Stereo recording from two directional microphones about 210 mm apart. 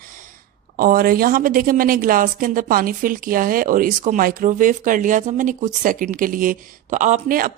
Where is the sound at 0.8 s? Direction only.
45° right (ahead or behind).